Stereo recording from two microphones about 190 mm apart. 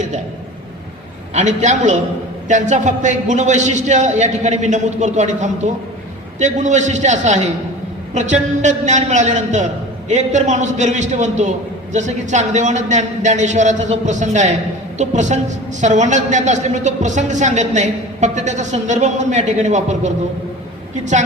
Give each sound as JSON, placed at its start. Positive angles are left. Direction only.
{"t": 1.3, "sound": "a woman's voice", "side_deg": -40}